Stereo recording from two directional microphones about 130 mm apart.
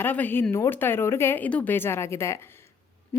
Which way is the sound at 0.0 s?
15° left (ahead or behind).